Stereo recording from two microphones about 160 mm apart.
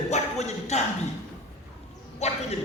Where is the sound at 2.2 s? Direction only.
40° left (ahead or behind).